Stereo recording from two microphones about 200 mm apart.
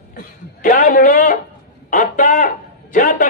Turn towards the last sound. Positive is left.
turn(degrees=40)  # may be behind; listen again after turning